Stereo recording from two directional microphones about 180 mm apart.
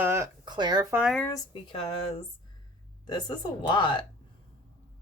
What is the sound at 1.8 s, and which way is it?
Speech, 30° left (ahead or behind).